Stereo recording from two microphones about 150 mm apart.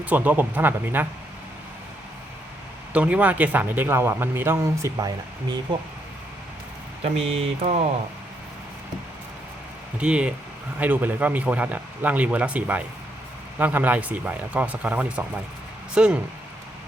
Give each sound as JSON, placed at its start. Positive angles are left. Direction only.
{"t": 0.0, "sound": "speech", "side_deg": -10}
{"t": 2.9, "sound": "speech", "side_deg": -10}
{"t": 7.0, "sound": "speech", "side_deg": -40}
{"t": 10.0, "sound": "speech", "side_deg": -5}